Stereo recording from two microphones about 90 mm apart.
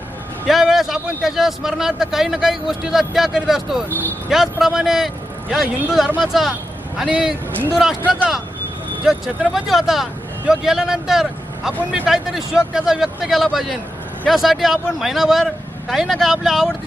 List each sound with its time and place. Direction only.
0.4 s a man's voice: centre (ahead or behind)
3.8 s speech: 20° left (ahead or behind)
4.3 s a man's voice: 5° right (ahead or behind)
9.0 s a man's voice: 5° right (ahead or behind)
11.8 s speech: 15° right (ahead or behind)
12.0 s a man's voice: 5° right (ahead or behind)